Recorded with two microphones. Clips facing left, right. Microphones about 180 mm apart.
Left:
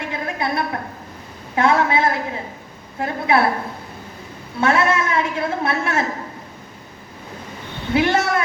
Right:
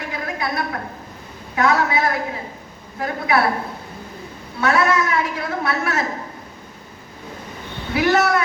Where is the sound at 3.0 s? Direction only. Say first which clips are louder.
Left 1 dB; 25° left (ahead or behind).